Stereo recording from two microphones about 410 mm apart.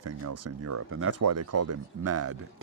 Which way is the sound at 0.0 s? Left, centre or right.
Right.